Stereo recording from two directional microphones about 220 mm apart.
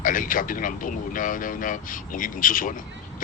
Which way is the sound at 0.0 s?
40° left (ahead or behind).